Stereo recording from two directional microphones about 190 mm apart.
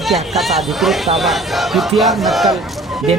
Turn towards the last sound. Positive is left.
turn(degrees=0)  # may be behind; listen again after turning